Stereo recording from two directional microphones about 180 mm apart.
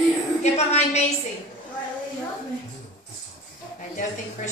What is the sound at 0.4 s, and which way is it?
Speech, 40° left (ahead or behind).